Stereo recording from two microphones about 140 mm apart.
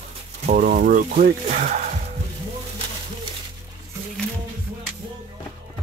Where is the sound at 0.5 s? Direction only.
75° right (ahead or behind).